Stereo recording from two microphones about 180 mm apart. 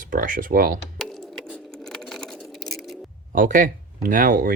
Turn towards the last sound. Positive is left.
turn(degrees=-50)  # may be behind; listen again after turning